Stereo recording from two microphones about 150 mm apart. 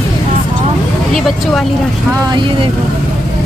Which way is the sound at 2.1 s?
25° right (ahead or behind).